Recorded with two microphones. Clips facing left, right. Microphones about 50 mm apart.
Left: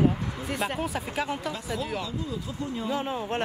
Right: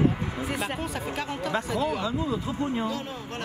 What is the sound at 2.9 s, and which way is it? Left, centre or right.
Speech, left.